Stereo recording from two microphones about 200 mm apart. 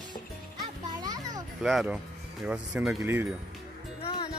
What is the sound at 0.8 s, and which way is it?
Music, 20° right (ahead or behind).